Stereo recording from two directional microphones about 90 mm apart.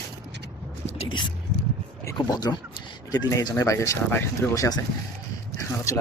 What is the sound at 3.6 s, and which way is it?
Speech, 35° left (ahead or behind).